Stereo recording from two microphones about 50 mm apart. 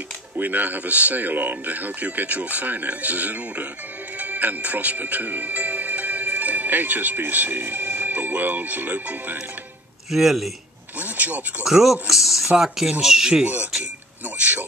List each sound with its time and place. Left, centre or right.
0.4 s speech: right
10.1 s speech: centre
11.0 s speech: right
11.6 s speech: centre